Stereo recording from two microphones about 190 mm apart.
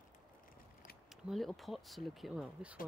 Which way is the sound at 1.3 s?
Centre (ahead or behind).